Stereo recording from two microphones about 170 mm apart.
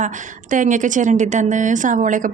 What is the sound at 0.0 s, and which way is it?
A woman's voice, 45° right (ahead or behind).